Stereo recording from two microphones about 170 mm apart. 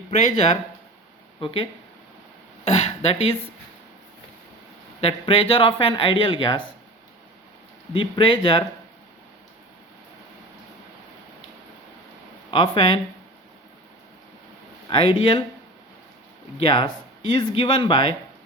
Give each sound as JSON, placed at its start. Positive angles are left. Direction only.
{"t": 0.1, "sound": "speech", "side_deg": 40}
{"t": 2.6, "sound": "speech", "side_deg": 40}
{"t": 4.9, "sound": "speech", "side_deg": 35}
{"t": 7.9, "sound": "speech", "side_deg": 30}
{"t": 12.5, "sound": "speech", "side_deg": 30}
{"t": 14.8, "sound": "speech", "side_deg": 35}
{"t": 16.6, "sound": "speech", "side_deg": 30}